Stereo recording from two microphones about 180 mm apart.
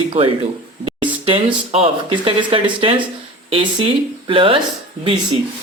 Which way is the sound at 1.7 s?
30° right (ahead or behind).